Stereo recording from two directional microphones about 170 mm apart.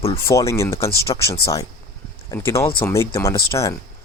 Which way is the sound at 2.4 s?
15° left (ahead or behind).